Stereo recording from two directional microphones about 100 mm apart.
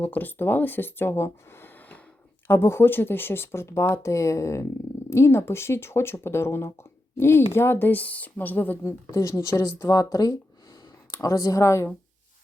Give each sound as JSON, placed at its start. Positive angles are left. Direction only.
{"t": 0.0, "sound": "speech", "side_deg": 15}